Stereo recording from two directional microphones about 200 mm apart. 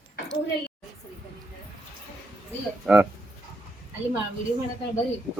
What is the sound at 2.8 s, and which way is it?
Speech, 5° right (ahead or behind).